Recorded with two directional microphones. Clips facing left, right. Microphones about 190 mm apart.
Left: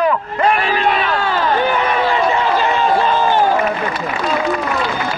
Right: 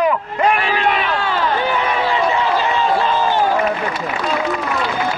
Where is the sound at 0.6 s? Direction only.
40° left (ahead or behind).